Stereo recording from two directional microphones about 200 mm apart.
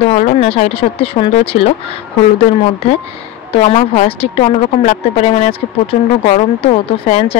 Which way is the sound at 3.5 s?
30° left (ahead or behind).